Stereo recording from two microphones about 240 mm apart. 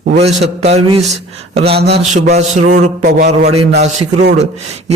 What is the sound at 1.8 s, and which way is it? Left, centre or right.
A man's voice, right.